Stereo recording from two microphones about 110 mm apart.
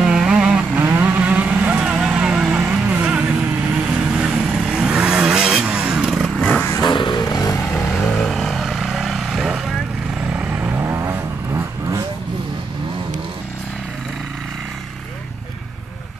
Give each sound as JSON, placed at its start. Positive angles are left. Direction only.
{"t": 0.0, "sound": "vehicle", "side_deg": -5}
{"t": 6.8, "sound": "vehicle", "side_deg": 45}
{"t": 7.7, "sound": "vehicle", "side_deg": 5}